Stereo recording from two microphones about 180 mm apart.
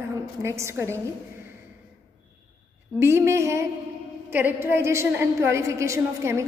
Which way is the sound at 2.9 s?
15° right (ahead or behind).